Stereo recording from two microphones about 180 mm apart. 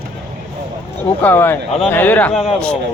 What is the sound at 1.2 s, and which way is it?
A man's voice, 10° left (ahead or behind).